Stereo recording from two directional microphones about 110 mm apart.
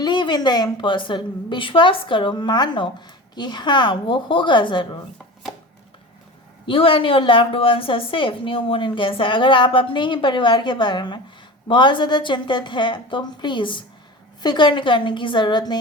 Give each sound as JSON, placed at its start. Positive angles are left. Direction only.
{"t": 0.0, "sound": "a woman's voice", "side_deg": 45}
{"t": 6.7, "sound": "a woman's voice", "side_deg": 55}